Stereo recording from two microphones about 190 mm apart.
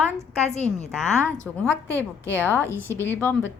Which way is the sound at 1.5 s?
10° right (ahead or behind).